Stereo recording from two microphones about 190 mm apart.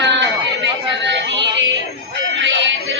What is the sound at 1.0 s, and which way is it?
Music, 70° right (ahead or behind).